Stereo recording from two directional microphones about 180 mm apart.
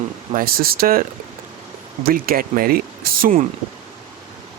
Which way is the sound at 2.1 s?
55° right (ahead or behind).